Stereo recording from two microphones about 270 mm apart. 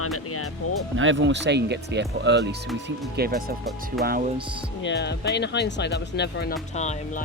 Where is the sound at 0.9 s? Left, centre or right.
Right.